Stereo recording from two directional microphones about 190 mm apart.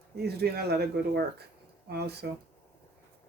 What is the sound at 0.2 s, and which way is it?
Speech, 60° right (ahead or behind).